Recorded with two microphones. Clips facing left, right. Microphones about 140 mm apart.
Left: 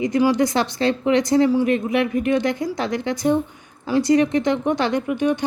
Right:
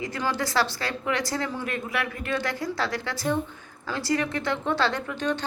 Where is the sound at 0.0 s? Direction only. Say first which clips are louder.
Left 11 dB; 20° left (ahead or behind).